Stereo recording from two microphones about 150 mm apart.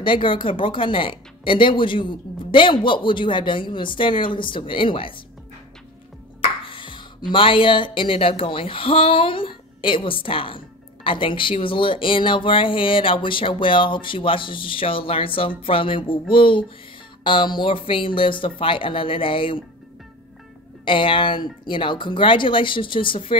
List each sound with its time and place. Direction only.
0.0 s speech: 35° left (ahead or behind)
6.7 s music: 35° left (ahead or behind)
7.3 s speech: 35° left (ahead or behind)
20.8 s speech: 35° left (ahead or behind)